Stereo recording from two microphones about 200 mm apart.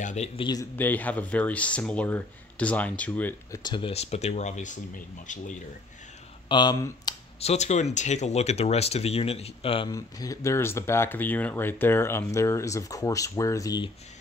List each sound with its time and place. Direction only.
0.0 s speech: 35° left (ahead or behind)
0.4 s speech: 20° left (ahead or behind)
0.7 s speech: 10° left (ahead or behind)
3.6 s speech: 25° left (ahead or behind)
6.5 s speech: 20° left (ahead or behind)
7.3 s speech: 35° left (ahead or behind); by 13.8 s 15° left (ahead or behind)